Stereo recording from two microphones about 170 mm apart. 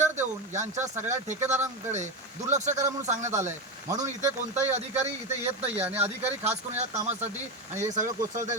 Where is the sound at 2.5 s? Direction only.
45° right (ahead or behind).